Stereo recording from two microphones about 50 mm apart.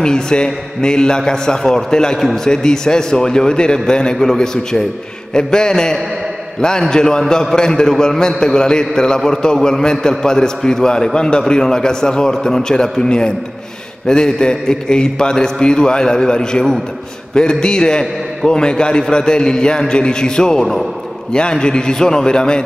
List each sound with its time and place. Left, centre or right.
0.0 s a man's voice: centre